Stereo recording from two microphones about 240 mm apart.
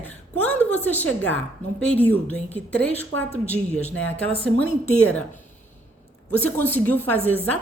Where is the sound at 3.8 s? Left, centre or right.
Left.